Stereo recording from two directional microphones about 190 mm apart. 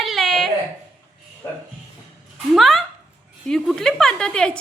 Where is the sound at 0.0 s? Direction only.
Centre (ahead or behind).